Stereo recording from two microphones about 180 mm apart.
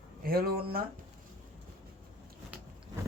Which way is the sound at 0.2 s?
55° right (ahead or behind).